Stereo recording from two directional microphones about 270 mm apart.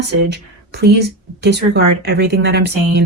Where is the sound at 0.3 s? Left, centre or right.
Right.